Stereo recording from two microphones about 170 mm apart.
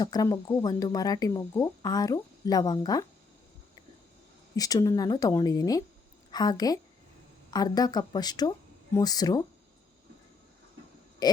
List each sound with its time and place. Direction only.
0.0 s speech: 20° left (ahead or behind)
4.5 s speech: 20° left (ahead or behind)
11.2 s a sound: 25° left (ahead or behind)